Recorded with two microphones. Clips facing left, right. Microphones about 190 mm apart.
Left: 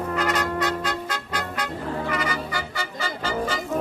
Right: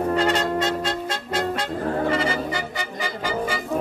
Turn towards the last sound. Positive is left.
turn(degrees=-15)  # may be behind; listen again after turning